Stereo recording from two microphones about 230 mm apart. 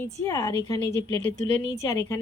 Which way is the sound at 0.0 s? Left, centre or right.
Centre.